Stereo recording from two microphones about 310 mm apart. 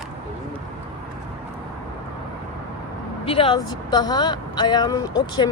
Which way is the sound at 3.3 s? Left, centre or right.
Centre.